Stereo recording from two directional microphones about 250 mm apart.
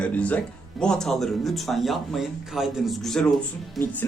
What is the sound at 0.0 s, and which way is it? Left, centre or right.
Speech, centre.